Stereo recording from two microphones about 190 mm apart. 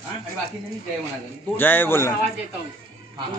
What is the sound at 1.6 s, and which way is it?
Speech, 10° left (ahead or behind).